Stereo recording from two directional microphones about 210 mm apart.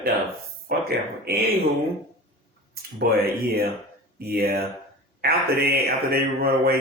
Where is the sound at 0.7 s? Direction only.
45° right (ahead or behind).